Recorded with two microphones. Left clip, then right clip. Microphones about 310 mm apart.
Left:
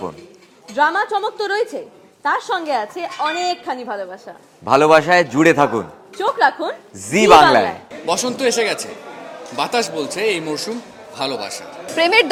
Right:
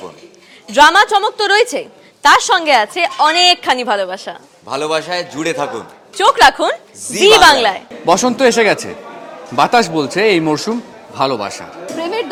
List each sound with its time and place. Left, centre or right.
0.8 s a woman's voice: right
4.6 s a man's voice: left
6.1 s a woman's voice: right
7.1 s a man's voice: left
8.0 s speech: right
11.1 s a man's voice: right
11.9 s speech: left